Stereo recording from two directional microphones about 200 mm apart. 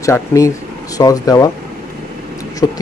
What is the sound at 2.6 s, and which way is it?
Speech, 20° left (ahead or behind).